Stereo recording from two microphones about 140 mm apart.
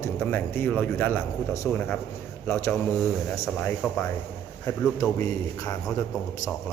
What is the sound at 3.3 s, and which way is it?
Speech, 15° left (ahead or behind).